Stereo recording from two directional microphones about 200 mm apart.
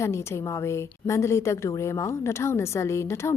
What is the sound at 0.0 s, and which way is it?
Speech, 15° left (ahead or behind).